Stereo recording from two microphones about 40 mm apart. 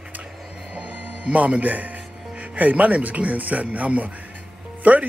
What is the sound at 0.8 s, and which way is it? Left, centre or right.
Music, right.